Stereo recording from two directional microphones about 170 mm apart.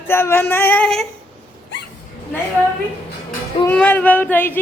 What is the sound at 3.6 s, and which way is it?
Female singing, 10° left (ahead or behind).